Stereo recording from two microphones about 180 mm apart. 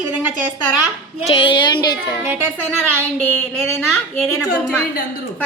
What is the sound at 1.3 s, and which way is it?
Speech, 30° left (ahead or behind).